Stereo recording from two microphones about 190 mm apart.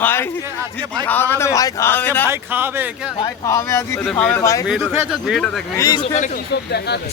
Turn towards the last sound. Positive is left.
turn(degrees=60)  # may be behind; listen again after turning